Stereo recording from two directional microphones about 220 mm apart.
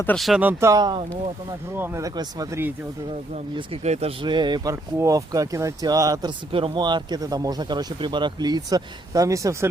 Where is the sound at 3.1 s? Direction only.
25° right (ahead or behind).